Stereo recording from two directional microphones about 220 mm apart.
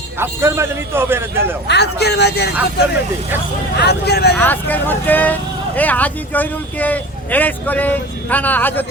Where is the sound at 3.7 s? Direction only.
45° left (ahead or behind).